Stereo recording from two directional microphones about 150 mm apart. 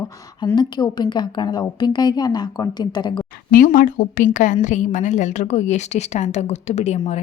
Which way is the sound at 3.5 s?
65° left (ahead or behind).